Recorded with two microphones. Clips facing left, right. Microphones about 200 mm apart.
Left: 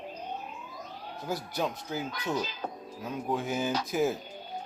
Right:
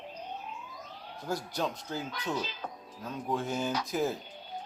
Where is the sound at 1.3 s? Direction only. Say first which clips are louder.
Left 1 dB; 10° left (ahead or behind).